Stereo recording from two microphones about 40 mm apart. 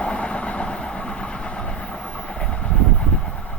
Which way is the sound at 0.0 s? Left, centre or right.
Left.